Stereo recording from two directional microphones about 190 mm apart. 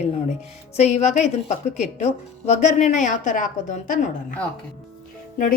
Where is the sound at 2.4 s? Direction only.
35° left (ahead or behind).